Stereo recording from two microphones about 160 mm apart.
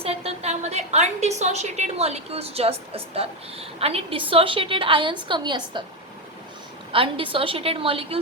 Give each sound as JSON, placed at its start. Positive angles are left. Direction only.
{"t": 0.0, "sound": "a woman's voice", "side_deg": -40}
{"t": 6.9, "sound": "a woman's voice", "side_deg": -35}